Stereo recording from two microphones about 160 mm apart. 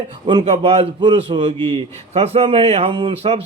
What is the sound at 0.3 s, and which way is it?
Speech, 30° right (ahead or behind).